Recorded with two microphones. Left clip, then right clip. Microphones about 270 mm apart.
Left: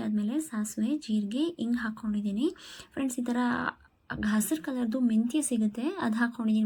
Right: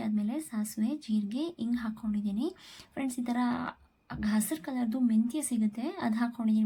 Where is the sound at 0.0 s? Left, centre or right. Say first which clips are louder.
Left 3 dB; centre.